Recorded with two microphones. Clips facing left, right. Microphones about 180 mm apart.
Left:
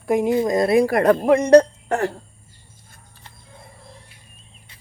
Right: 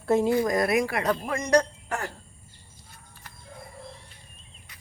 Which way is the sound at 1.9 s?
65° left (ahead or behind).